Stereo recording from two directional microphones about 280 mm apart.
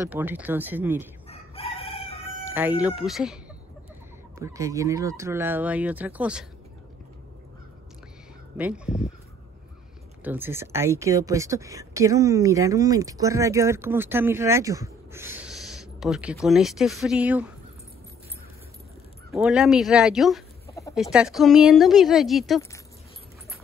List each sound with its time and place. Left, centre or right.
0.1 s speech: centre
1.3 s chicken: left
2.8 s a woman's voice: centre
4.4 s speech: centre
8.5 s a woman's voice: centre
10.2 s speech: centre
19.3 s a woman's voice: centre
20.6 s chicken: centre
20.9 s a woman's voice: centre